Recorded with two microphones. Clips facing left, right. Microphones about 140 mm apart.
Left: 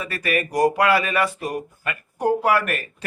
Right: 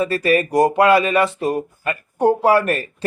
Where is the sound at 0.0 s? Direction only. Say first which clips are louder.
Right 8 dB; 30° right (ahead or behind).